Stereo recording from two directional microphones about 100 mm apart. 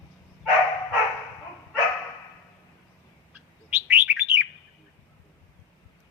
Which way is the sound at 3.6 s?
15° right (ahead or behind).